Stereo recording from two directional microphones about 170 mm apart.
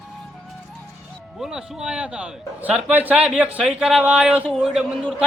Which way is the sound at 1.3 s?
5° right (ahead or behind).